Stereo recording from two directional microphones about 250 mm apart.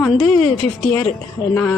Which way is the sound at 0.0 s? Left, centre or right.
Centre.